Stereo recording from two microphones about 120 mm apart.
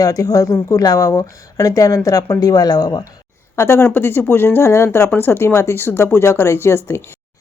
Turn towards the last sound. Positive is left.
turn(degrees=20)  # may be behind; listen again after turning